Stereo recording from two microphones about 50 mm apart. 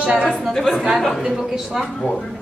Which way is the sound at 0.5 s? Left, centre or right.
Centre.